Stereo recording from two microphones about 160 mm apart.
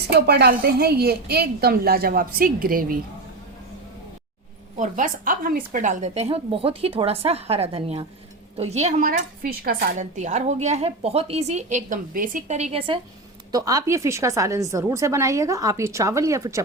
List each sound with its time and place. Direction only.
0.1 s a woman's voice: 90° right; by 3.0 s 60° right (ahead or behind)
4.8 s a woman's voice: 55° right (ahead or behind)
9.0 s a woman's voice: 65° right (ahead or behind)
10.0 s a woman's voice: 50° right (ahead or behind)
13.5 s a woman's voice: 20° right (ahead or behind)